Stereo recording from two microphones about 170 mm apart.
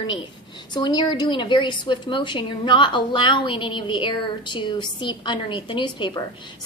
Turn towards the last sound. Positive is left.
turn(degrees=25)  # may be behind; listen again after turning